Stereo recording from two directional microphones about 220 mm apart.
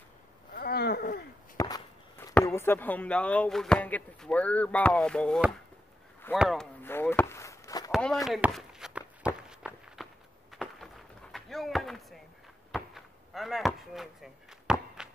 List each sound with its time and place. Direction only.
0.6 s a sound: 45° left (ahead or behind)
1.6 s speech: 15° left (ahead or behind)
6.3 s chop: centre (ahead or behind); by 7.9 s 15° left (ahead or behind)
7.9 s walk: centre (ahead or behind)
10.5 s a sound: centre (ahead or behind)
11.3 s chop: centre (ahead or behind)